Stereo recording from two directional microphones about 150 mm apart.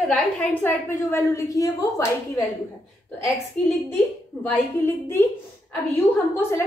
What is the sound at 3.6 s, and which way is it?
Speech, 5° left (ahead or behind).